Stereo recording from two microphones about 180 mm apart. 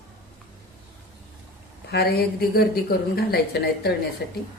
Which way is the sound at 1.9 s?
60° left (ahead or behind).